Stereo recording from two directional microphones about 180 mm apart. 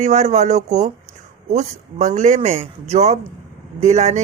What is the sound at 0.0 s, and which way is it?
Speech, 40° right (ahead or behind).